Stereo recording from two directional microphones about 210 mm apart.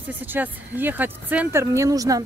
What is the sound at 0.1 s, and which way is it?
Speech, 10° right (ahead or behind).